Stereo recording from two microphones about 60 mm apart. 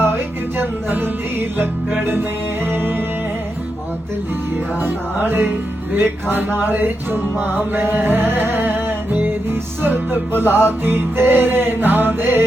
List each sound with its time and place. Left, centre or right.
0.5 s music: right
4.8 s music: right